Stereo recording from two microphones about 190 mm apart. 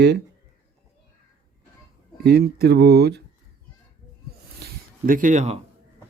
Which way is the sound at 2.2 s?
55° right (ahead or behind).